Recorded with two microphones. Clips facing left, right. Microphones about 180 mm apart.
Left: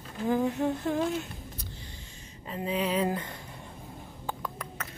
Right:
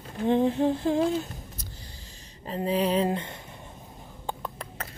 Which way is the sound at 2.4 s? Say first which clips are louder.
Right 4 dB; 35° right (ahead or behind).